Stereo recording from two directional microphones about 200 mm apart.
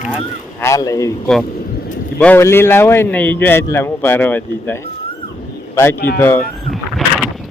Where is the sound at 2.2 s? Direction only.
10° left (ahead or behind).